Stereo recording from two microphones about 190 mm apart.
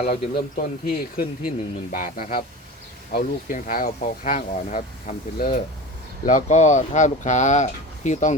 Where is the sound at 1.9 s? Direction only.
45° left (ahead or behind).